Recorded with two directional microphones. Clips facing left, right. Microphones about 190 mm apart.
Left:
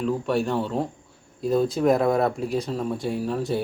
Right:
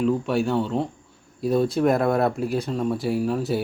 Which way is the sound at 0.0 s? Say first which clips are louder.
Right 2 dB; centre (ahead or behind).